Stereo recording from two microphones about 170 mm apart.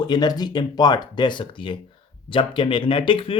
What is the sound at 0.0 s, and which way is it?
Speech, 25° left (ahead or behind).